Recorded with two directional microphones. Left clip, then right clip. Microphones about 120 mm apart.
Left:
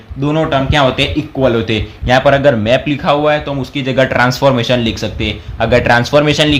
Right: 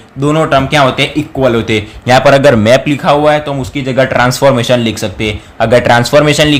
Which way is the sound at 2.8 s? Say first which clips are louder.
Right 4 dB; 45° right (ahead or behind).